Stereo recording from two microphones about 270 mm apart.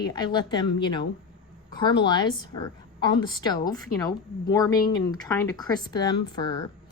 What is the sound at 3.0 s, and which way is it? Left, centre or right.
Speech, centre.